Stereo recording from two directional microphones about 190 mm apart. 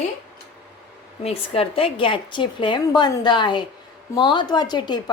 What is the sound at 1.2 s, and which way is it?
A woman's voice, 30° left (ahead or behind).